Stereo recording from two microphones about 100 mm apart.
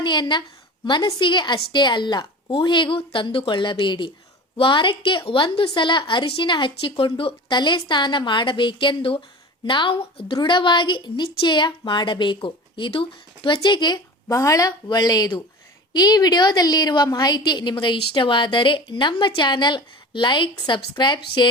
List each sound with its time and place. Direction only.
0.0 s a woman's voice: 50° left (ahead or behind)